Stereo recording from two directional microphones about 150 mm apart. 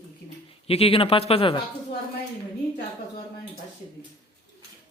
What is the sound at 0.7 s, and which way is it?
Speech, 40° left (ahead or behind).